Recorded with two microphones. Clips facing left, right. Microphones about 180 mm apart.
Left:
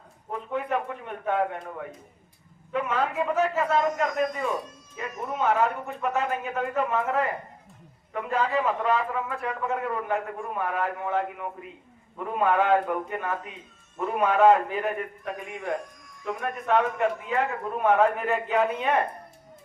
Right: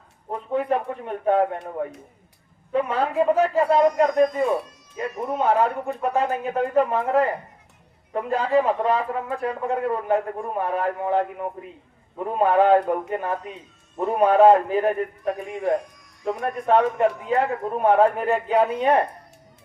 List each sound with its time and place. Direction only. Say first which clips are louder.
0.3 s a man's voice: right 5 dB; 35° right (ahead or behind)
2.7 s a man's voice: right 5 dB; 35° right (ahead or behind)